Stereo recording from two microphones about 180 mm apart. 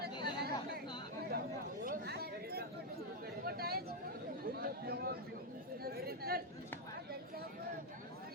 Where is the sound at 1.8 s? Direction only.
60° right (ahead or behind).